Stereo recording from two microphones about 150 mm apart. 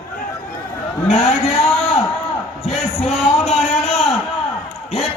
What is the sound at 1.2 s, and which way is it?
Speech, 40° left (ahead or behind).